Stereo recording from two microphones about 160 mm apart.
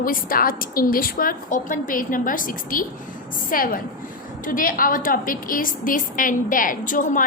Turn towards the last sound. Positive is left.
turn(degrees=55)  # may be behind; listen again after turning